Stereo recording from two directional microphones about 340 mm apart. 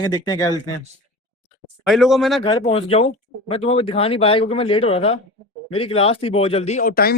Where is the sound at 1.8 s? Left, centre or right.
Centre.